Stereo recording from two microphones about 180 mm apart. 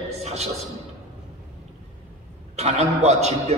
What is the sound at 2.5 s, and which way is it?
Speech, 35° right (ahead or behind).